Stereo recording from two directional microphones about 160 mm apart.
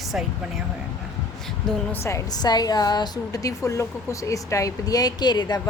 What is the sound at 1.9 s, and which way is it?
A woman's voice, 15° left (ahead or behind).